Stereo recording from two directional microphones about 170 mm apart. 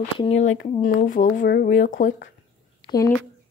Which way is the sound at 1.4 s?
75° left (ahead or behind).